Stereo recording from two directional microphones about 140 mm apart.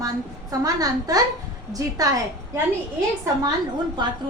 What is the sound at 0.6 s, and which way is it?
A woman's voice, 25° right (ahead or behind).